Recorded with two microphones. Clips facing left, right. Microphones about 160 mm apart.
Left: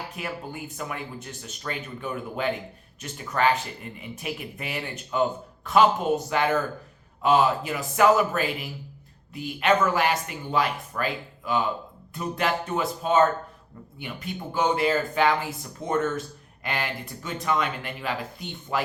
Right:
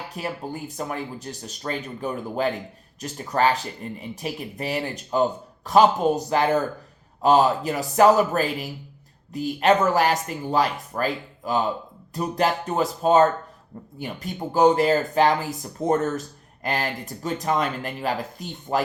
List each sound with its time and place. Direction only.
0.2 s speech: 35° right (ahead or behind)